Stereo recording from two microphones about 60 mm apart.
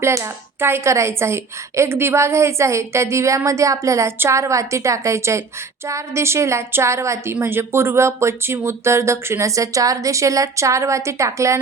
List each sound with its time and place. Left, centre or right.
0.6 s a woman's voice: right
7.4 s a woman's voice: right